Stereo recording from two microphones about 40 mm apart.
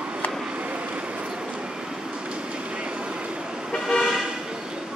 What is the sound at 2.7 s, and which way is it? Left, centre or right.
Vehicle, right.